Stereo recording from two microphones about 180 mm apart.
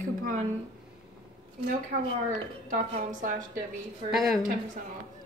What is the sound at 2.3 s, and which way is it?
A woman's voice, 45° right (ahead or behind).